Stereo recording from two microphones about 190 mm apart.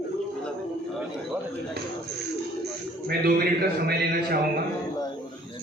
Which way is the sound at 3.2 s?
55° right (ahead or behind).